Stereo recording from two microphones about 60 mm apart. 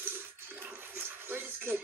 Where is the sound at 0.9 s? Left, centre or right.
Right.